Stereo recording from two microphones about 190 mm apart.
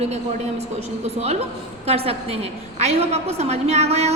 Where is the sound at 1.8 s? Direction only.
30° right (ahead or behind).